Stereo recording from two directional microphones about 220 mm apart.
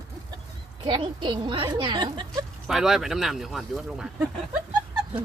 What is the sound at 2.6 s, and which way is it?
Speech, centre (ahead or behind).